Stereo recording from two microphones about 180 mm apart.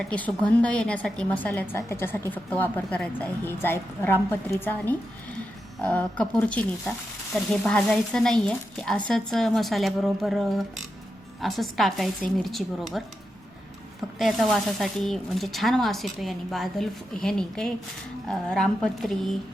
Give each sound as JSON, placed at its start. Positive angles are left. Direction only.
{"t": 0.0, "sound": "a woman's voice", "side_deg": 5}
{"t": 14.2, "sound": "speech", "side_deg": 0}